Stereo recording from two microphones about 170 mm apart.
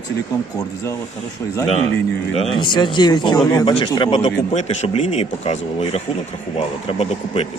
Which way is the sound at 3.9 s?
30° left (ahead or behind).